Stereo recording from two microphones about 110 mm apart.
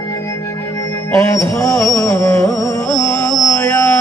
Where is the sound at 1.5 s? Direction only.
25° left (ahead or behind).